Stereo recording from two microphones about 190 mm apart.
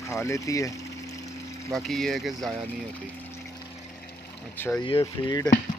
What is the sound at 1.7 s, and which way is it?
Speech, centre (ahead or behind).